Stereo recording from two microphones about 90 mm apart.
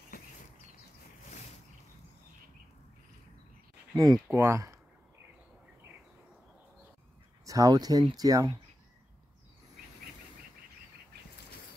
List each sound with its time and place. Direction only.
3.9 s speech: 45° right (ahead or behind)
4.4 s speech: 30° right (ahead or behind)
7.4 s speech: 45° right (ahead or behind)